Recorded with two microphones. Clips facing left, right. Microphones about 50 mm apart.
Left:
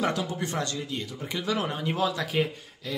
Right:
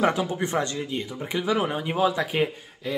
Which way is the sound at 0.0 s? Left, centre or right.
Right.